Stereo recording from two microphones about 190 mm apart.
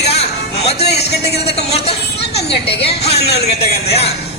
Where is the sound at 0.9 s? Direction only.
60° left (ahead or behind).